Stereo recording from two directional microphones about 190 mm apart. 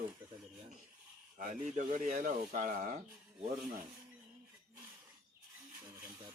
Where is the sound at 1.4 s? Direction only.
40° right (ahead or behind).